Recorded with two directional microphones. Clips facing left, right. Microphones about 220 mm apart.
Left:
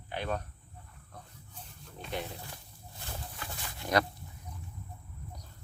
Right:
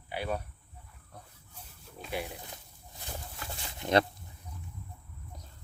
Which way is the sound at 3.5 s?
25° right (ahead or behind).